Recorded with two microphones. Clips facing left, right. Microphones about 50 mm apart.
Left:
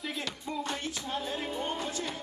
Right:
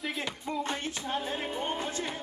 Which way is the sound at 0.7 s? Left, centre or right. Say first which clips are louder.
Right 2 dB; right.